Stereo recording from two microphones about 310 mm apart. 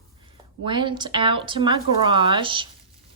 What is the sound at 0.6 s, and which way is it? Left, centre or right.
A woman's voice, centre.